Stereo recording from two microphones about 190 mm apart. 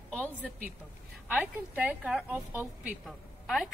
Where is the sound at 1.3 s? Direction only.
10° right (ahead or behind).